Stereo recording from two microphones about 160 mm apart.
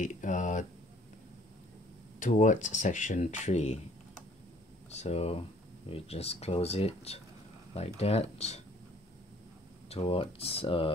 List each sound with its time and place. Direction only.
0.0 s a sound: 50° left (ahead or behind)
2.1 s speech: 55° left (ahead or behind)
4.9 s speech: 40° left (ahead or behind)
9.8 s speech: 35° left (ahead or behind)